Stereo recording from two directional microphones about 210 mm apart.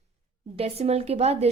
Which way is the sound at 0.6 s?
30° right (ahead or behind).